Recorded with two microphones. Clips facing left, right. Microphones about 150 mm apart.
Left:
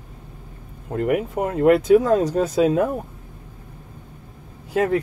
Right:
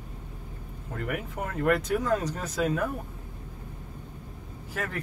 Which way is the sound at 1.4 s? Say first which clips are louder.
Left 9 dB; 55° left (ahead or behind).